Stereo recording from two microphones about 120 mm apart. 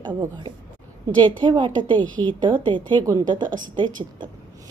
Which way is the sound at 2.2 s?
40° right (ahead or behind).